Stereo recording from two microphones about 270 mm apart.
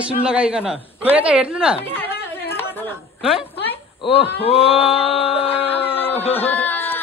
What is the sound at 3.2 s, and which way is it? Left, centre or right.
Speech, centre.